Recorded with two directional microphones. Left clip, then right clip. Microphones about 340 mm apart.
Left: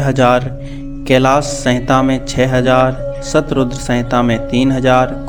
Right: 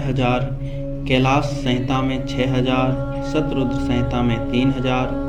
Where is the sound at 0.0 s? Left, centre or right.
Left.